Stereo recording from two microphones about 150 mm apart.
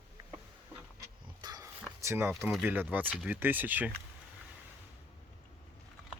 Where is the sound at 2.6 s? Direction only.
15° right (ahead or behind).